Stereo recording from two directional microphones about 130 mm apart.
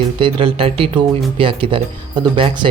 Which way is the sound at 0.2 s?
45° right (ahead or behind).